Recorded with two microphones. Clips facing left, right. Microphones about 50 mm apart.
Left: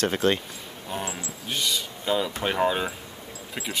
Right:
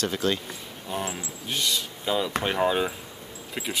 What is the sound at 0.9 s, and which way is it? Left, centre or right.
Speech, centre.